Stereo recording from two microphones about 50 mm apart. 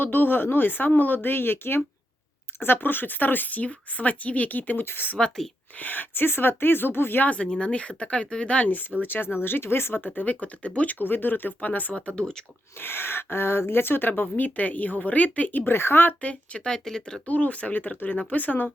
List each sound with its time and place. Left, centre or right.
0.0 s speech: left
4.9 s speech: left
5.1 s speech: centre
5.8 s speech: left
7.3 s speech: centre
8.6 s speech: left
10.2 s speech: left
11.0 s speech: left
11.9 s speech: left
12.8 s speech: left
14.2 s speech: left
15.5 s speech: left
16.2 s speech: left
17.2 s speech: left